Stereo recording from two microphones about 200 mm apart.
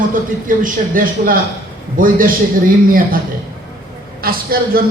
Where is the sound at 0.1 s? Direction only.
40° right (ahead or behind).